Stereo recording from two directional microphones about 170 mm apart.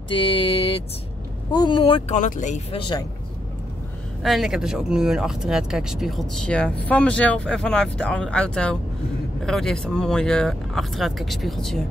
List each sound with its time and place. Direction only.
0.1 s a sound: 30° left (ahead or behind)
1.5 s speech: 25° left (ahead or behind)
2.1 s speech: 45° left (ahead or behind)
2.7 s speech: 25° left (ahead or behind)
4.2 s speech: centre (ahead or behind)